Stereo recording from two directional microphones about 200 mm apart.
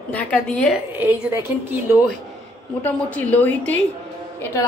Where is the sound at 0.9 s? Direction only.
10° right (ahead or behind).